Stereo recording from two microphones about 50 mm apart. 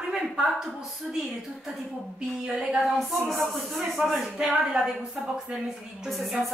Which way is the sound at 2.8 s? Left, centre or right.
Centre.